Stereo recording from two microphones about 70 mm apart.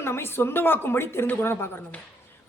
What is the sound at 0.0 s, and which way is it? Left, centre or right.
A woman's voice, left.